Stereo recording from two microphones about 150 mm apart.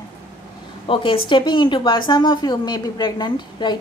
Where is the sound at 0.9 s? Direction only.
35° left (ahead or behind).